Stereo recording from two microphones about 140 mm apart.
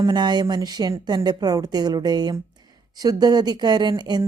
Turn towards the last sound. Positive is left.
turn(degrees=-30)  # may be behind; listen again after turning